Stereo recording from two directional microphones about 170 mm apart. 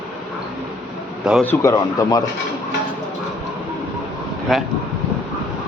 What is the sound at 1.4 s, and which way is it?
Speech, 15° left (ahead or behind).